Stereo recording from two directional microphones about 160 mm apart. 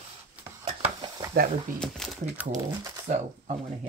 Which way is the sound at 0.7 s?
40° right (ahead or behind).